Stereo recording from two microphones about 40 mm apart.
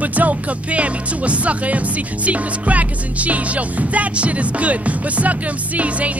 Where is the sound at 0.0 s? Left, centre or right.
Right.